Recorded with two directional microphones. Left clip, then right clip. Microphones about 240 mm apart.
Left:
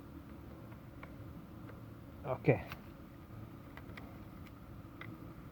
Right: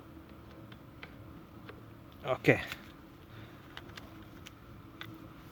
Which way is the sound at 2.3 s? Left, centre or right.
Right.